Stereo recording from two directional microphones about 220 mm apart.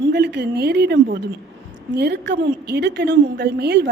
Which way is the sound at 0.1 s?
50° right (ahead or behind).